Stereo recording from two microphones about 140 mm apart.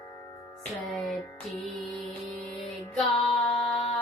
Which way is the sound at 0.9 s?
Centre (ahead or behind).